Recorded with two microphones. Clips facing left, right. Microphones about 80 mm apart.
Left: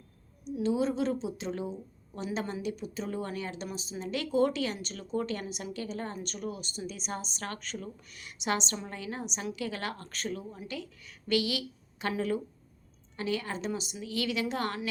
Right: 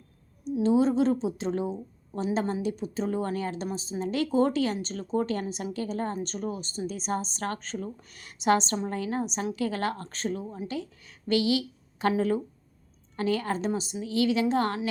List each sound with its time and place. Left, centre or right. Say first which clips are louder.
0.6 s a woman's voice: right 6 dB; right